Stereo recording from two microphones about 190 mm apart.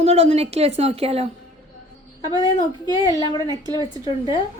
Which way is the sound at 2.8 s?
20° left (ahead or behind).